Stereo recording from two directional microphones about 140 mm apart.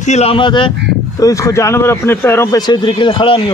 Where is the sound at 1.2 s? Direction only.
20° left (ahead or behind).